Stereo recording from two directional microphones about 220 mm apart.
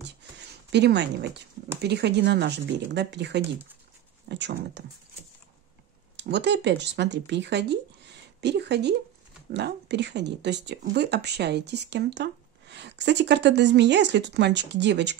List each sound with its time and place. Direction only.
0.2 s a sound: 50° right (ahead or behind)
0.7 s speech: 50° right (ahead or behind)
6.1 s speech: 50° right (ahead or behind)